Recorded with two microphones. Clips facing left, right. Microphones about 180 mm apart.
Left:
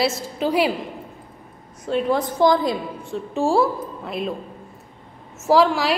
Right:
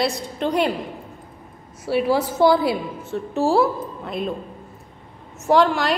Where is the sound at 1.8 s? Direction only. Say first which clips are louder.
Right 1 dB; 10° right (ahead or behind).